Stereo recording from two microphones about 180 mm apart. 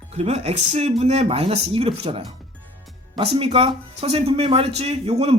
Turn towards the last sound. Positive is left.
turn(degrees=-35)  # may be behind; listen again after turning